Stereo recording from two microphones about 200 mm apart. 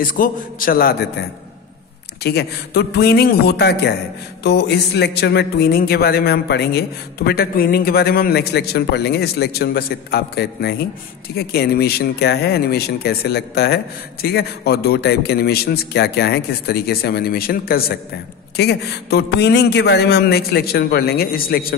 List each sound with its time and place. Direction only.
0.0 s a man's voice: 45° left (ahead or behind)
2.2 s a man's voice: 55° left (ahead or behind)